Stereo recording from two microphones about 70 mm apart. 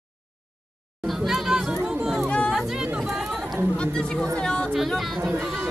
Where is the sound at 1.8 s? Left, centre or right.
Centre.